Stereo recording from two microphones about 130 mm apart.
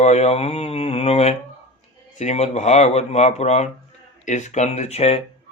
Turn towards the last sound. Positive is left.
turn(degrees=55)  # may be behind; listen again after turning